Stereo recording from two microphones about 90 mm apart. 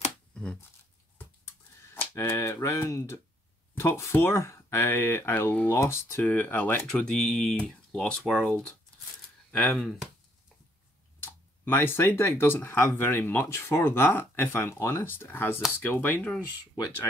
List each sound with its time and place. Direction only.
0.3 s a sound: 10° left (ahead or behind)
2.1 s speech: 30° left (ahead or behind); by 8.5 s 5° left (ahead or behind)
9.5 s speech: 10° left (ahead or behind)
11.6 s speech: 25° left (ahead or behind)